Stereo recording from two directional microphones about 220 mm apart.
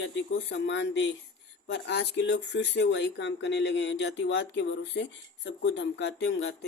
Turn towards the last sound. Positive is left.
turn(degrees=55)  # may be behind; listen again after turning